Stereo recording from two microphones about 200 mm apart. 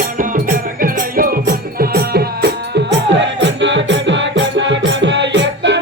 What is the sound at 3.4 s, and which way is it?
Music, 65° right (ahead or behind).